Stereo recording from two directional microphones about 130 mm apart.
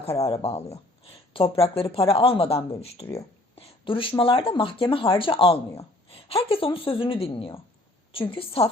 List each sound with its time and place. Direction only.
0.0 s speech: 50° left (ahead or behind)